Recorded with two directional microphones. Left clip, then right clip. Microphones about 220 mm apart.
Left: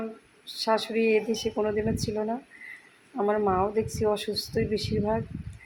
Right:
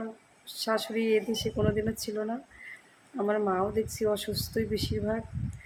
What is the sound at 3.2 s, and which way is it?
Speech, 10° right (ahead or behind).